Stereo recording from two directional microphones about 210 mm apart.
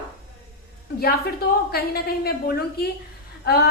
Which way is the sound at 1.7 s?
50° left (ahead or behind).